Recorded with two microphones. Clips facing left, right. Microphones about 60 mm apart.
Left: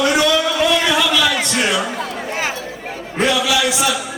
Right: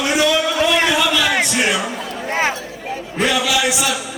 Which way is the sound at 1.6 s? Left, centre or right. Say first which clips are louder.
Even; centre.